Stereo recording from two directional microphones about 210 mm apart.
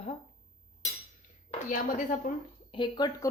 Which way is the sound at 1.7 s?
35° left (ahead or behind).